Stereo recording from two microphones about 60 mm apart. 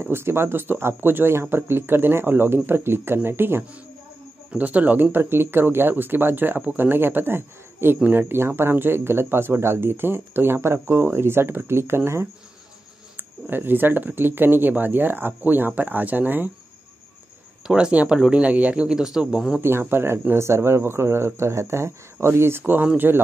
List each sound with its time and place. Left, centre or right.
0.0 s speech: right
4.5 s speech: right
13.1 s speech: right
17.6 s speech: centre
19.6 s speech: right